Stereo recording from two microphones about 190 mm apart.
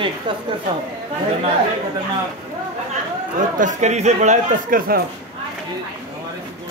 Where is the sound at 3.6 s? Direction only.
40° right (ahead or behind).